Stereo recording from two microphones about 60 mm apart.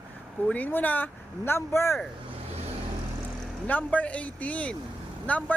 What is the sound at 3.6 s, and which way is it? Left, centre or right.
Speech, left.